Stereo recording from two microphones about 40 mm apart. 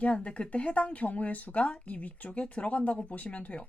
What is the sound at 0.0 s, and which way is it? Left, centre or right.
Speech, left.